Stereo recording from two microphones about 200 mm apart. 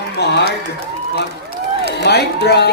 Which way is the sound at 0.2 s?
55° left (ahead or behind).